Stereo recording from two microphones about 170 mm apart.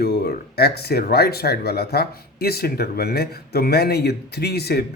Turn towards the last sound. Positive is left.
turn(degrees=70)  # may be behind; listen again after turning